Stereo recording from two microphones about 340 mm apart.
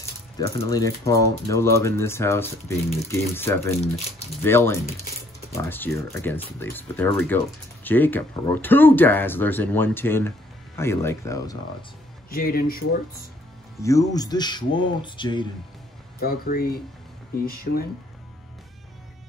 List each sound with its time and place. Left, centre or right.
0.4 s speech: centre
12.3 s speech: left
13.7 s speech: centre
16.2 s speech: left